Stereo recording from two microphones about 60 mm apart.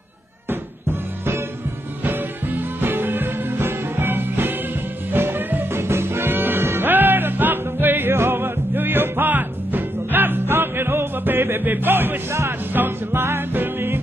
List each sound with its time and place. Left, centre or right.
0.5 s music: right
12.3 s music: right